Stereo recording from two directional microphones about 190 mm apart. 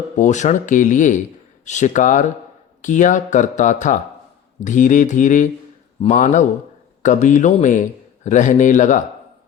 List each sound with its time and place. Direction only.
0.2 s speech: 40° left (ahead or behind)